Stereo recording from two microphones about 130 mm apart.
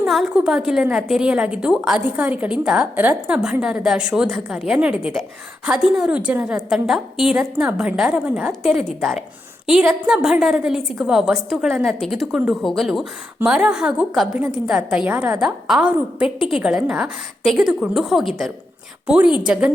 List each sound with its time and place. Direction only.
0.0 s a woman's voice: 5° right (ahead or behind)
15.4 s a woman's voice: 5° right (ahead or behind)